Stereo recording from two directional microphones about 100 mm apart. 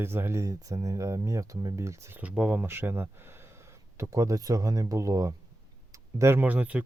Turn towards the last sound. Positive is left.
turn(degrees=-15)  # may be behind; listen again after turning